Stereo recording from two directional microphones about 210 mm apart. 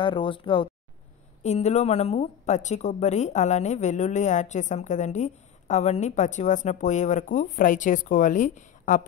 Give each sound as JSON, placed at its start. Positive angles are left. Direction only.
{"t": 0.0, "sound": "a woman's voice", "side_deg": 25}